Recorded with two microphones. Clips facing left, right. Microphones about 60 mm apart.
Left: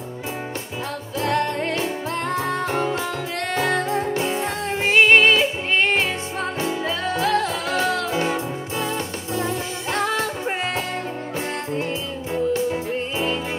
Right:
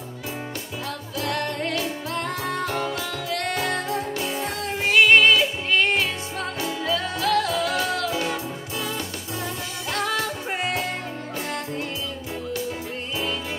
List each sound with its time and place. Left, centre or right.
1.1 s music: left